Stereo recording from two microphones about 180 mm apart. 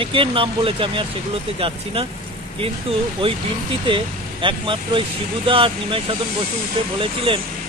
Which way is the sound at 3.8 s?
30° right (ahead or behind).